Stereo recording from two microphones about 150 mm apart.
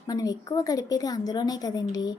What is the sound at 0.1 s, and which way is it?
A woman's voice, 25° left (ahead or behind).